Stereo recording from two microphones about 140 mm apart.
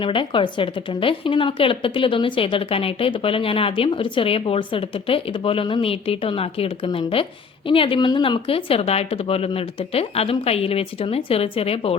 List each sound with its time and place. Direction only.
0.0 s a woman's voice: 35° left (ahead or behind)